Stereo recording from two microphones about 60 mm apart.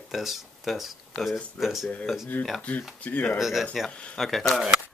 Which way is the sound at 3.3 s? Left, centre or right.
Centre.